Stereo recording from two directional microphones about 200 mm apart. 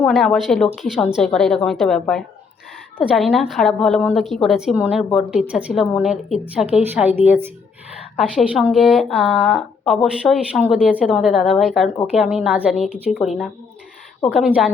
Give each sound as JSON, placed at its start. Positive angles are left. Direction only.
{"t": 0.1, "sound": "a woman's voice", "side_deg": 0}